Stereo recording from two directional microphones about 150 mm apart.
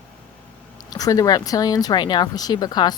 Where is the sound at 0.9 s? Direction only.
25° left (ahead or behind).